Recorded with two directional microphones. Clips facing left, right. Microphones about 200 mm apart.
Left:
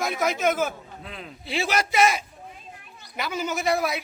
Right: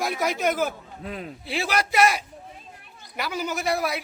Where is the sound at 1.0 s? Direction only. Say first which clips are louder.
Right 8 dB; 45° right (ahead or behind).